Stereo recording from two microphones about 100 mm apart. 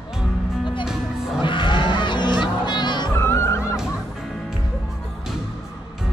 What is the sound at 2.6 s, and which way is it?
Music, 50° left (ahead or behind).